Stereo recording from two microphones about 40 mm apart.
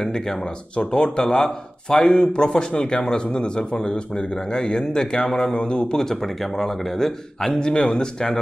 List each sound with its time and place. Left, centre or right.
0.0 s speech: centre
0.7 s a man's voice: left
6.0 s speech: centre